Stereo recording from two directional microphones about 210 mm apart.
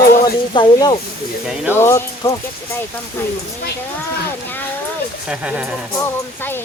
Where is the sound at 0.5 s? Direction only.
20° left (ahead or behind).